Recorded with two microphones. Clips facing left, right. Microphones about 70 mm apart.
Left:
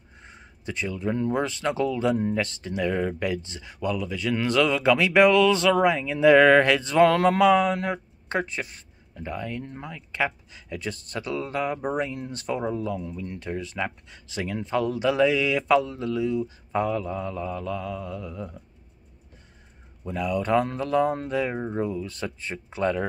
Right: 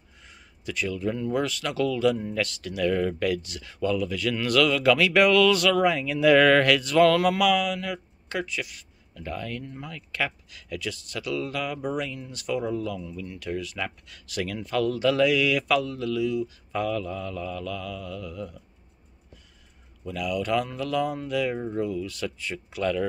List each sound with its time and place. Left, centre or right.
0.2 s a sound: left
1.3 s speech: left
9.2 s speech: centre
20.1 s speech: left